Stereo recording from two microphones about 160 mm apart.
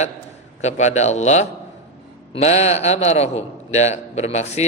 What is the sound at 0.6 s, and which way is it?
A man's voice, 45° left (ahead or behind).